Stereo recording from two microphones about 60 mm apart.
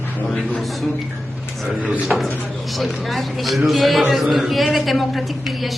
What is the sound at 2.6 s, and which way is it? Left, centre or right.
A man's voice, centre.